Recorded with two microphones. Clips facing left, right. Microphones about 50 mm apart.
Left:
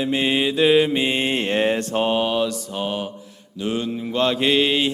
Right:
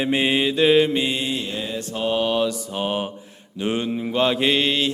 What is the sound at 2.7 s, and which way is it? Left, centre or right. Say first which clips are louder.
Mantra: right 1 dB; centre.